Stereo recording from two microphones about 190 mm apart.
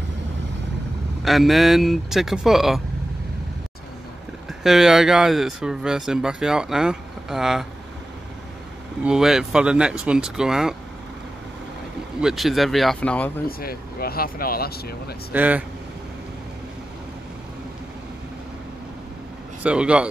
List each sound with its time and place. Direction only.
1.2 s speech: centre (ahead or behind)
4.5 s speech: centre (ahead or behind)
9.0 s speech: 5° right (ahead or behind)
12.2 s speech: centre (ahead or behind)
13.5 s speech: 50° left (ahead or behind)
15.3 s speech: 10° right (ahead or behind)
19.6 s speech: 5° right (ahead or behind)